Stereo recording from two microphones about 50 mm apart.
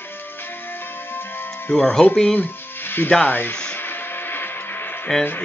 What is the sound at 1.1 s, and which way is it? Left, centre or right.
Music, left.